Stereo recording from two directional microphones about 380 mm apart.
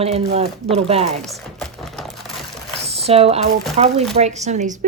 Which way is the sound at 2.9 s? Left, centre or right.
Centre.